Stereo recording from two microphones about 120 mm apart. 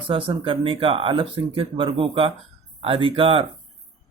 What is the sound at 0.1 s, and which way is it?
Speech, 50° right (ahead or behind).